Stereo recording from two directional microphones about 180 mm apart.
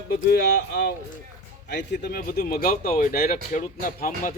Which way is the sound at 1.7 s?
70° left (ahead or behind).